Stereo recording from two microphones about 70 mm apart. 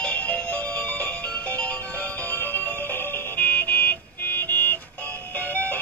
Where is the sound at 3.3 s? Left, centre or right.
Left.